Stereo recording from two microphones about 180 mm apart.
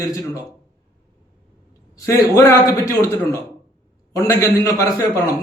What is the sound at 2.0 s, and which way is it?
A man's voice, 15° left (ahead or behind).